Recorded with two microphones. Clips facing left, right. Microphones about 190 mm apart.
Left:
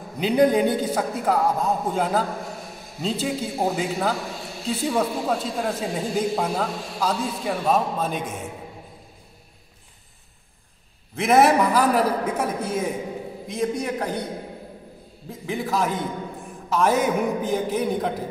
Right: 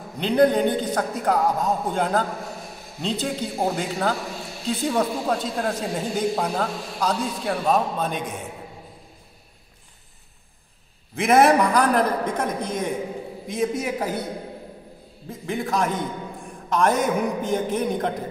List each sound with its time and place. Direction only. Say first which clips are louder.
0.2 s a man's voice: even; 10° left (ahead or behind)
11.1 s a man's voice: even; centre (ahead or behind)
15.2 s a man's voice: even; centre (ahead or behind)